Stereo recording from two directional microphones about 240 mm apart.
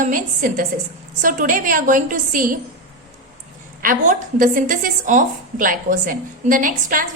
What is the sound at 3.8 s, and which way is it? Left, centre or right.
A woman's voice, right.